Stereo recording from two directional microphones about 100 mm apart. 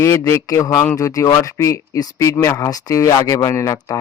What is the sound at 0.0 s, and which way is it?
Speech, 30° left (ahead or behind).